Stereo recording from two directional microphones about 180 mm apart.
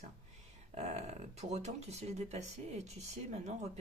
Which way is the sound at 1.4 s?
40° right (ahead or behind).